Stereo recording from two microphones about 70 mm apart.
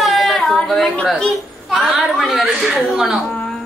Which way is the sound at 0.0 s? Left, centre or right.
Centre.